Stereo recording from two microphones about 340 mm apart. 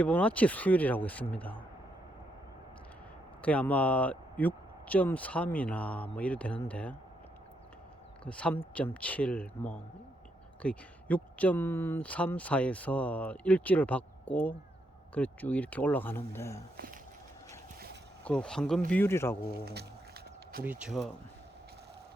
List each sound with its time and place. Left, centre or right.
0.0 s speech: centre
3.4 s speech: centre
8.2 s speech: centre
16.7 s speech: right
18.3 s speech: centre
20.7 s speech: centre